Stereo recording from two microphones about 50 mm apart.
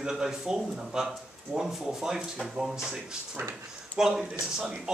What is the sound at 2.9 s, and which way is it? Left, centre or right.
Speech, right.